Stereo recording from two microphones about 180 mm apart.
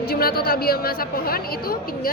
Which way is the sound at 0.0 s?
60° left (ahead or behind).